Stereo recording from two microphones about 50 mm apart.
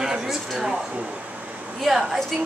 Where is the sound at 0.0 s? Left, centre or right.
Centre.